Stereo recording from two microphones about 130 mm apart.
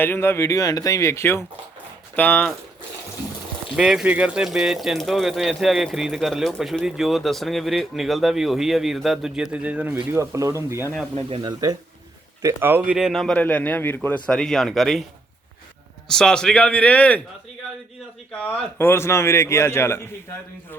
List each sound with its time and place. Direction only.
0.0 s a man's voice: 20° left (ahead or behind)
3.8 s speech: 5° right (ahead or behind); by 11.8 s 30° right (ahead or behind)
12.4 s speech: 20° right (ahead or behind); by 14.2 s 15° left (ahead or behind)
14.3 s speech: 5° left (ahead or behind)
16.0 s a man's voice: 5° left (ahead or behind)
18.3 s a man's voice: 10° left (ahead or behind)